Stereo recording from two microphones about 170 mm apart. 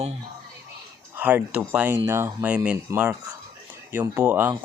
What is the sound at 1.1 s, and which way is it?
Speech, 10° right (ahead or behind).